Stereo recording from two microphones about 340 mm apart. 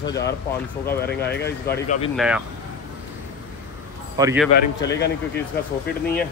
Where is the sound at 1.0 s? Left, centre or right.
Left.